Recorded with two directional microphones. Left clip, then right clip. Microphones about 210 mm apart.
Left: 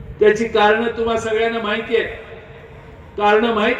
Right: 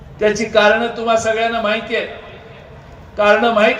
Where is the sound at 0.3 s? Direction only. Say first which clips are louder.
Right 2 dB; 45° right (ahead or behind).